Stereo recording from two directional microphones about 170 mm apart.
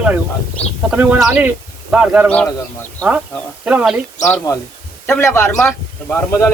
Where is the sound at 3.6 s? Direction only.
5° right (ahead or behind).